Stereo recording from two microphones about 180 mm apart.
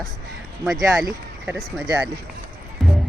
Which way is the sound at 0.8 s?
20° right (ahead or behind).